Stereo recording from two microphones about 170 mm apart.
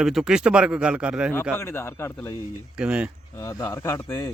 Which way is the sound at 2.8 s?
5° right (ahead or behind).